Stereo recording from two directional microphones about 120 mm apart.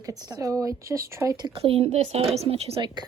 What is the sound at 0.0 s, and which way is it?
A woman's voice, 35° right (ahead or behind).